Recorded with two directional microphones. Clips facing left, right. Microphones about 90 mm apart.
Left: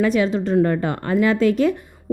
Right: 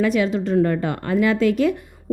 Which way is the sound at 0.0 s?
35° left (ahead or behind).